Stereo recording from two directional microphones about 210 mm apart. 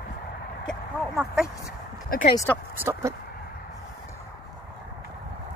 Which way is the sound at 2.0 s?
45° left (ahead or behind).